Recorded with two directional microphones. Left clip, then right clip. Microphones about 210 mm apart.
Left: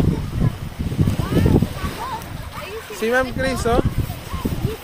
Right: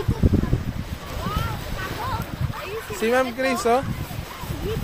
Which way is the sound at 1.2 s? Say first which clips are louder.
Left 4 dB; 50° left (ahead or behind).